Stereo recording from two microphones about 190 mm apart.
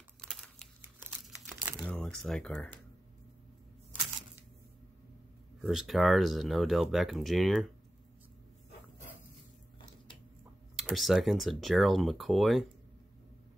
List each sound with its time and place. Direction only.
0.3 s crumpling: 5° left (ahead or behind)
1.1 s crumpling: 10° right (ahead or behind)
1.9 s speech: 5° left (ahead or behind)
5.6 s speech: centre (ahead or behind)
10.8 s speech: centre (ahead or behind)